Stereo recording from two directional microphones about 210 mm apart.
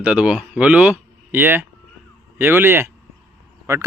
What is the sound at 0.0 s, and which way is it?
Speech, 5° right (ahead or behind).